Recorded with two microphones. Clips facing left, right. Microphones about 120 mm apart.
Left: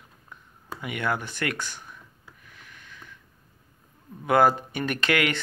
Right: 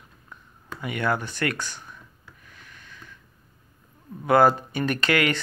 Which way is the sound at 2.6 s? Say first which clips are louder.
Even; 15° left (ahead or behind).